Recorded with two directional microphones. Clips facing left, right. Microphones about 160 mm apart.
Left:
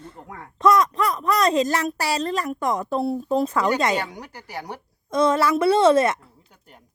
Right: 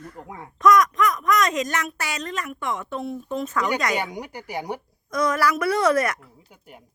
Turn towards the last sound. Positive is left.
turn(degrees=25)  # may be behind; listen again after turning